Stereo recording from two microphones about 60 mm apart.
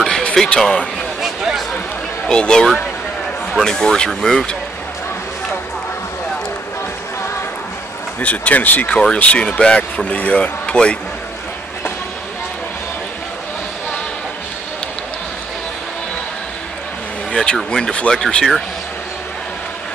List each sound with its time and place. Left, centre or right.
0.2 s speech: centre
1.2 s a sound: centre
2.2 s speech: centre
8.2 s speech: left
17.3 s speech: centre